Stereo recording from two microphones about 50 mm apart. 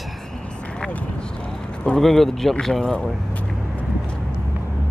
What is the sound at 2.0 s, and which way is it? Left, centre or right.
Speech, centre.